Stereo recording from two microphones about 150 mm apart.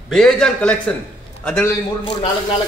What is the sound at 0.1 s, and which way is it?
A man's voice, 5° left (ahead or behind).